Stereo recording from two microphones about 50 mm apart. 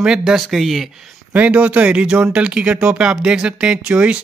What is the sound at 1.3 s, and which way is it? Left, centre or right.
Speech, right.